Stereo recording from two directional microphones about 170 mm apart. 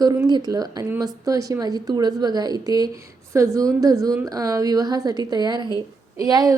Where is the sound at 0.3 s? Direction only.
25° right (ahead or behind).